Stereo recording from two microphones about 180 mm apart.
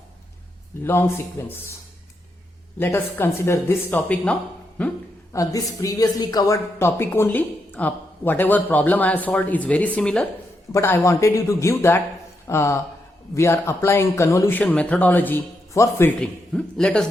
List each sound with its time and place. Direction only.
0.9 s speech: 10° left (ahead or behind)
2.7 s speech: 10° left (ahead or behind)
5.3 s speech: 20° left (ahead or behind)